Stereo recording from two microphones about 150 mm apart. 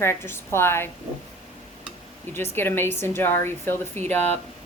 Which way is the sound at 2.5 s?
15° left (ahead or behind).